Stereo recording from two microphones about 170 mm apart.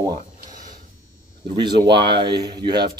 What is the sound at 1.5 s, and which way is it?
Speech, 25° right (ahead or behind).